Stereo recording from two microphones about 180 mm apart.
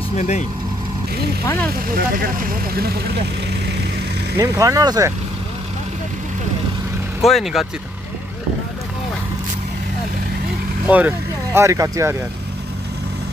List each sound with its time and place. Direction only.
1.4 s speech: 15° left (ahead or behind)
2.0 s speech: 50° right (ahead or behind)
4.4 s speech: 20° right (ahead or behind)
7.2 s speech: centre (ahead or behind)
10.9 s speech: 10° right (ahead or behind)